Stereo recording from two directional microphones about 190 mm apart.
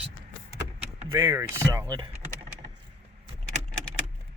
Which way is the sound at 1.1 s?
15° right (ahead or behind).